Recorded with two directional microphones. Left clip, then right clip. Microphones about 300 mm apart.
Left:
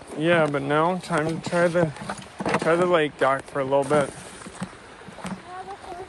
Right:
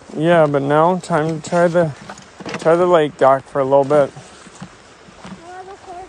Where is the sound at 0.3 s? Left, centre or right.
Right.